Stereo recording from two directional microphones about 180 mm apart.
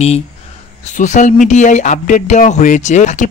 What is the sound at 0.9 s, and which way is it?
Speech, 40° left (ahead or behind).